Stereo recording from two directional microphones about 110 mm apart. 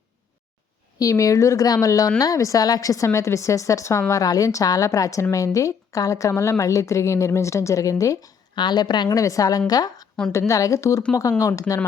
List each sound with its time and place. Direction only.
0.9 s a woman's voice: 30° left (ahead or behind)